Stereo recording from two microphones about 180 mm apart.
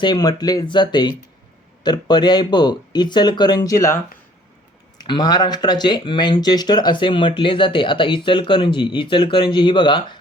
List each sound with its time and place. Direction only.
0.0 s speech: 20° left (ahead or behind)